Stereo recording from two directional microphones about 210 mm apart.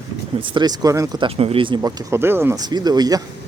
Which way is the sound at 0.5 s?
20° right (ahead or behind).